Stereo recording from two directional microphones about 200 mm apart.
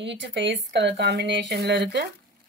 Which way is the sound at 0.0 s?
60° right (ahead or behind).